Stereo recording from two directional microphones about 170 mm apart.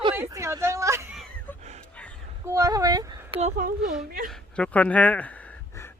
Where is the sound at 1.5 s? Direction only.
10° left (ahead or behind).